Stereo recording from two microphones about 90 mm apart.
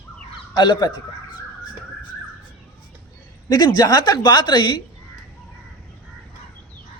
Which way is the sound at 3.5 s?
50° left (ahead or behind).